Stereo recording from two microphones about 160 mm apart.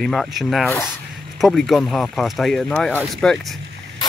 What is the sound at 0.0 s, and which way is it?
Speech, centre (ahead or behind).